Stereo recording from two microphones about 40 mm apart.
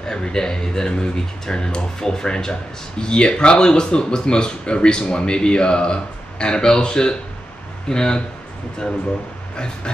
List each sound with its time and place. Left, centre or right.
0.1 s speech: centre